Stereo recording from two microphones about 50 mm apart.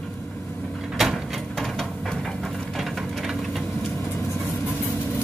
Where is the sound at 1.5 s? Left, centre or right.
Centre.